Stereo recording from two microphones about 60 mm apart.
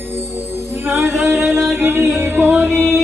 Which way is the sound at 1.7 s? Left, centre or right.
Right.